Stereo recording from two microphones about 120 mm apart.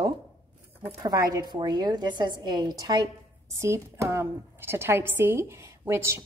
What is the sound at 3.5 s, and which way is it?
A woman's voice, 25° right (ahead or behind).